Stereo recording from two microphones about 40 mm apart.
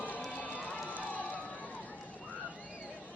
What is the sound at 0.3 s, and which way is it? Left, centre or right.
Run, left.